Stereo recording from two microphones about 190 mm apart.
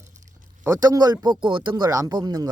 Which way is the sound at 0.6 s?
15° right (ahead or behind).